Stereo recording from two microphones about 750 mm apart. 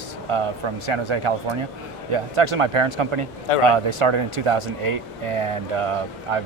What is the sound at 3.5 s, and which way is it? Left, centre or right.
Speech, left.